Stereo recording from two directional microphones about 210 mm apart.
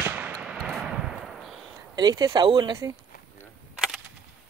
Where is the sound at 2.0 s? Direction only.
20° right (ahead or behind).